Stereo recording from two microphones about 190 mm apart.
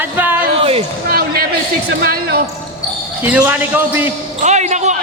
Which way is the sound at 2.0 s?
50° right (ahead or behind).